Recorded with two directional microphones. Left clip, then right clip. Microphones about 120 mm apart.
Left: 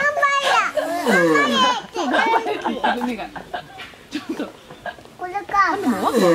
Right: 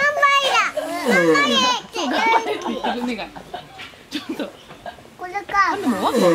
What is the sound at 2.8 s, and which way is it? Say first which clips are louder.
Speech: left 3 dB; 25° left (ahead or behind).